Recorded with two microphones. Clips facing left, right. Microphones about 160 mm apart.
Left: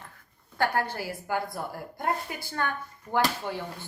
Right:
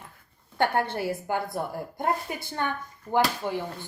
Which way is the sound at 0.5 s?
25° right (ahead or behind).